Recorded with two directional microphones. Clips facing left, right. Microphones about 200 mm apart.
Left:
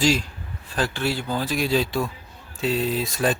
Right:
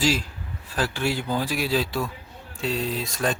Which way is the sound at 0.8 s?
10° right (ahead or behind).